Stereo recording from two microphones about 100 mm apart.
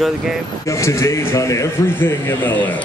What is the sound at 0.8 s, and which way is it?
Speech, 25° left (ahead or behind).